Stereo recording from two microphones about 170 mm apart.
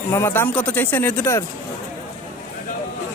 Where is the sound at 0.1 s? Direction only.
15° left (ahead or behind).